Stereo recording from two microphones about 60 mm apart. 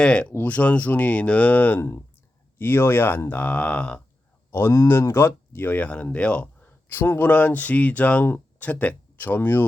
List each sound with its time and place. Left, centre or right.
0.0 s speech: centre
2.6 s speech: left
3.2 s speech: left
4.9 s speech: left
5.8 s speech: left
6.8 s speech: left
7.3 s speech: left